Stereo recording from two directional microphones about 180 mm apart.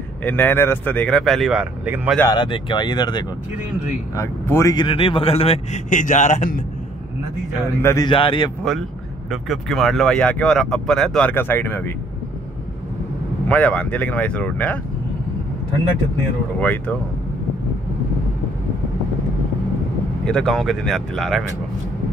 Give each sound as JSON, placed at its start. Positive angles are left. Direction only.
{"t": 0.2, "sound": "speech", "side_deg": 10}
{"t": 2.2, "sound": "speech", "side_deg": 25}
{"t": 5.9, "sound": "speech", "side_deg": 45}
{"t": 7.8, "sound": "speech", "side_deg": 20}
{"t": 9.3, "sound": "speech", "side_deg": 0}
{"t": 13.5, "sound": "speech", "side_deg": 5}
{"t": 16.5, "sound": "speech", "side_deg": 10}
{"t": 20.2, "sound": "speech", "side_deg": 0}